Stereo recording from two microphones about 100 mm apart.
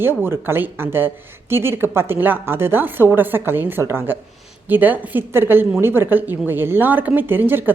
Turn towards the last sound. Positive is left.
turn(degrees=-20)  # may be behind; listen again after turning